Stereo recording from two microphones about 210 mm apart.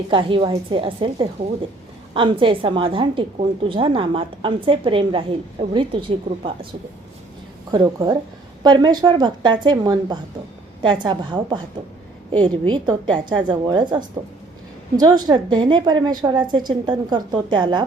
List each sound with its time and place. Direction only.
0.1 s a woman's voice: 25° right (ahead or behind)
7.7 s a woman's voice: 20° right (ahead or behind)